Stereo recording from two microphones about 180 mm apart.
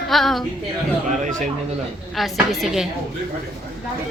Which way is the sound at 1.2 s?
45° right (ahead or behind).